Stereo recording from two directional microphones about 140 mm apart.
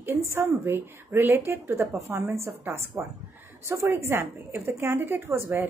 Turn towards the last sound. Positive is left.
turn(degrees=-15)  # may be behind; listen again after turning